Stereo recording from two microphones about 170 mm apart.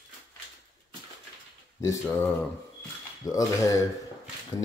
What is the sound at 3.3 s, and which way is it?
Speech, 20° left (ahead or behind).